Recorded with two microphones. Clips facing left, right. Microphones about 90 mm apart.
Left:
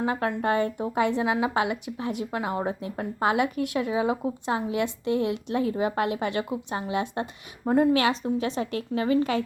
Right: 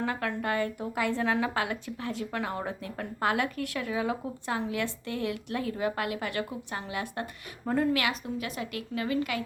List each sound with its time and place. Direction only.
0.0 s speech: 20° left (ahead or behind)